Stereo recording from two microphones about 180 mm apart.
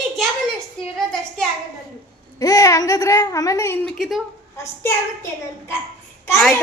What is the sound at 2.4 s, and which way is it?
A child's voice, 20° left (ahead or behind).